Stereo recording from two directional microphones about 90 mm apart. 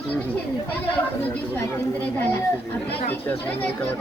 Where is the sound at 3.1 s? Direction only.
20° left (ahead or behind).